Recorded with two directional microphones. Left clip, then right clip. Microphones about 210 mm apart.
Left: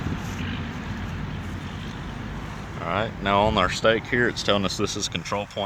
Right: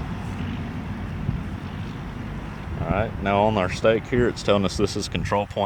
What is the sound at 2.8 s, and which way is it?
Speech, 35° right (ahead or behind).